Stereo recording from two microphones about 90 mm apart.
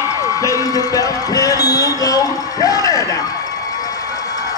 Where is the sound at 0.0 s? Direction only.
35° left (ahead or behind).